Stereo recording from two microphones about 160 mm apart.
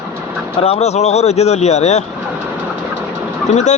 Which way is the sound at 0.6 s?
40° left (ahead or behind).